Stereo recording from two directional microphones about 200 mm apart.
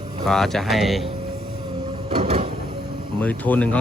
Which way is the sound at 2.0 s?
30° right (ahead or behind).